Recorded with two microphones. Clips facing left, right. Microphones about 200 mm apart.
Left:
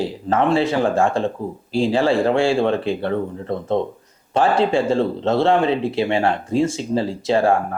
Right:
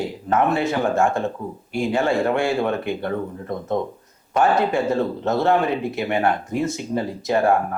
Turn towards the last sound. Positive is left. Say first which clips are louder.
# left 2 dB
turn(degrees=30)  # may be behind; listen again after turning